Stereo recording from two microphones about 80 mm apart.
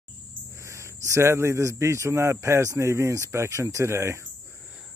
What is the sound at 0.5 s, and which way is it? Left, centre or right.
Speech, right.